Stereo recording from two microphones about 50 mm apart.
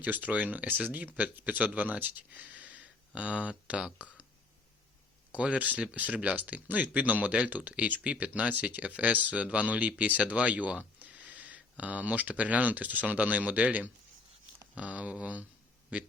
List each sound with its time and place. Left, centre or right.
0.0 s speech: right
5.4 s speech: right